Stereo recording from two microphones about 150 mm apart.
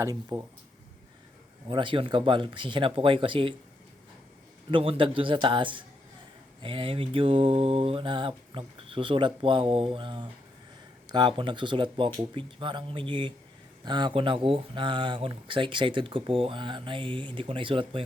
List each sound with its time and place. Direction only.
0.0 s speech: 20° right (ahead or behind)
1.6 s mantra: 35° right (ahead or behind)
4.7 s mantra: 35° right (ahead or behind)